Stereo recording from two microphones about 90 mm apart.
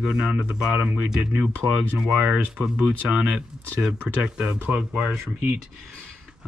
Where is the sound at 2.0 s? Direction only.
10° right (ahead or behind).